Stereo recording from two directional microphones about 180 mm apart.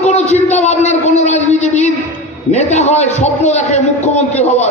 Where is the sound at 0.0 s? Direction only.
40° left (ahead or behind).